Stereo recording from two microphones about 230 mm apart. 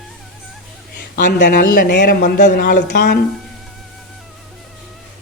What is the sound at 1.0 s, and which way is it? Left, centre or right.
A man's voice, left.